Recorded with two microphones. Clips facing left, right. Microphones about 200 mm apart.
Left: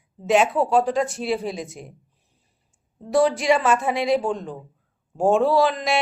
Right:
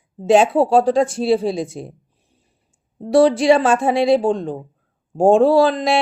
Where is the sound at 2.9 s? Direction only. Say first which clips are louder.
Right 6 dB; 35° right (ahead or behind).